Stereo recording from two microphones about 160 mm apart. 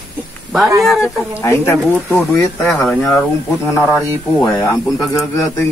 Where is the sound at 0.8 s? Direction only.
Centre (ahead or behind).